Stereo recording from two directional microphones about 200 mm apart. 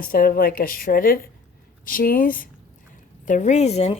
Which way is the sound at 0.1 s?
45° left (ahead or behind).